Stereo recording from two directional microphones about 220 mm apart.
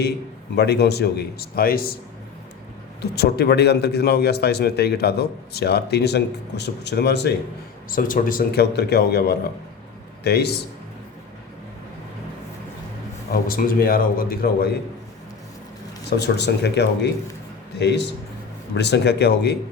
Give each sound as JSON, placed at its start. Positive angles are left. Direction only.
{"t": 0.5, "sound": "a man's voice", "side_deg": 50}
{"t": 3.0, "sound": "a man's voice", "side_deg": 45}
{"t": 7.9, "sound": "a man's voice", "side_deg": 40}
{"t": 13.3, "sound": "a man's voice", "side_deg": 40}
{"t": 16.0, "sound": "a man's voice", "side_deg": 50}